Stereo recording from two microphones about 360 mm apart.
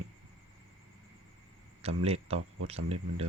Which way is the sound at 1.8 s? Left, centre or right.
Centre.